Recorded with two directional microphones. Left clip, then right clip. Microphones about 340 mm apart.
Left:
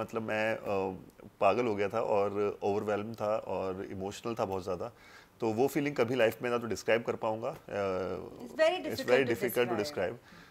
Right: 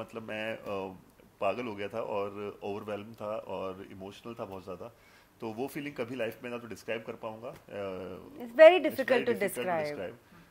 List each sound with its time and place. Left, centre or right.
0.0 s speech: centre
4.1 s speech: left
8.5 s a woman's voice: right
9.6 s speech: left